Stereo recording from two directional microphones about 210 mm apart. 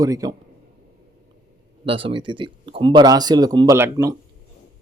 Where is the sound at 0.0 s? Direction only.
15° right (ahead or behind).